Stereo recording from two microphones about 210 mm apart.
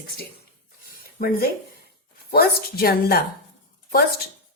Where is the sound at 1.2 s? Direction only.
45° left (ahead or behind).